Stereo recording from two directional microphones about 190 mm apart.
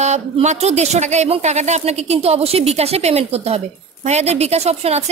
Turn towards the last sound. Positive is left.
turn(degrees=-35)  # may be behind; listen again after turning